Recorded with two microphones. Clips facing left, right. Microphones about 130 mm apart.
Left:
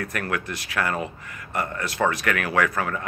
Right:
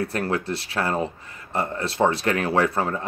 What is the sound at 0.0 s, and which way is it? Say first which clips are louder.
Speech: right 4 dB; 30° right (ahead or behind).